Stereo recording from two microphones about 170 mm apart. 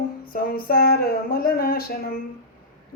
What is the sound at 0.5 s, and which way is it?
Speech, 65° left (ahead or behind).